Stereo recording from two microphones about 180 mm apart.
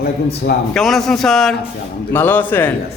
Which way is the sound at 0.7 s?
Centre (ahead or behind).